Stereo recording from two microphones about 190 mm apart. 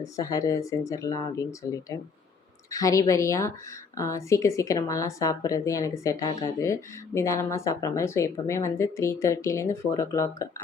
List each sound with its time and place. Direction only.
0.0 s a woman's voice: 20° left (ahead or behind)